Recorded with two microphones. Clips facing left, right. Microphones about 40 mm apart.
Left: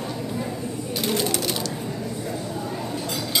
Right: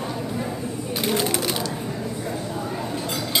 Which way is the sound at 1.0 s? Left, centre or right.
Centre.